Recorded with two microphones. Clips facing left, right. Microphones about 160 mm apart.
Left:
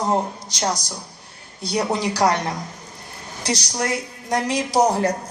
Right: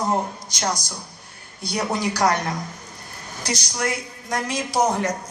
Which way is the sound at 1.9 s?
30° left (ahead or behind).